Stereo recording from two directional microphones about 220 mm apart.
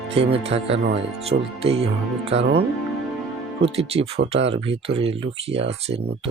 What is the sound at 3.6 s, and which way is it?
Speech, 25° right (ahead or behind).